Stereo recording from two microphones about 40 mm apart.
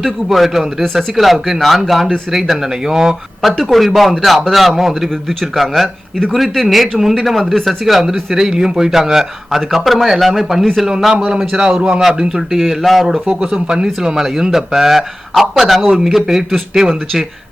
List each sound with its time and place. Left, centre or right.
0.0 s speech: centre
3.4 s speech: centre
8.3 s speech: centre
11.1 s speech: right
11.3 s speech: centre
12.5 s speech: centre
13.2 s speech: right; by 15.9 s centre
15.9 s speech: centre